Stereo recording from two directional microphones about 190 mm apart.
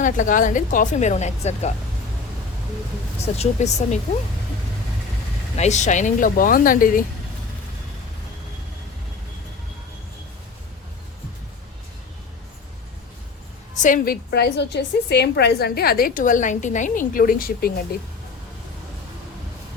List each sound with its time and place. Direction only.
0.0 s a woman's voice: 45° left (ahead or behind)
3.2 s speech: 35° left (ahead or behind)
5.5 s a woman's voice: 40° left (ahead or behind)
13.8 s a woman's voice: 50° left (ahead or behind)